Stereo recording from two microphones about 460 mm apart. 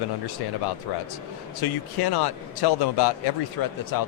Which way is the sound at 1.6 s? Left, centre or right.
Left.